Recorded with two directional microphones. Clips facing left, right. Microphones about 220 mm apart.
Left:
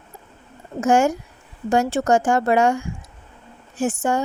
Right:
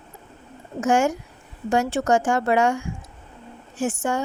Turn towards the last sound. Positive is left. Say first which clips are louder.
# left 3 dB
turn(degrees=35)  # may be behind; listen again after turning